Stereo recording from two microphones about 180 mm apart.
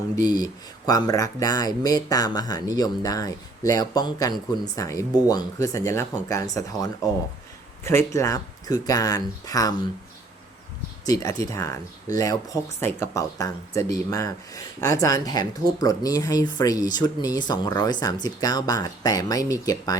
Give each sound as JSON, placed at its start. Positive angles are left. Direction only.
{"t": 0.2, "sound": "speech", "side_deg": 20}
{"t": 11.0, "sound": "speech", "side_deg": 20}